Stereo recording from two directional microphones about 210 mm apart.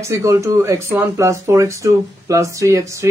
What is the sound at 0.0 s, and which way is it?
Speech, 15° right (ahead or behind).